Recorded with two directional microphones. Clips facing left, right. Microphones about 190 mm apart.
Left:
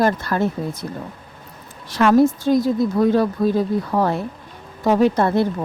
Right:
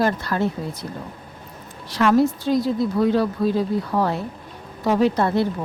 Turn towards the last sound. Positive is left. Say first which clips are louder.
# left 2 dB
turn(degrees=50)  # may be behind; listen again after turning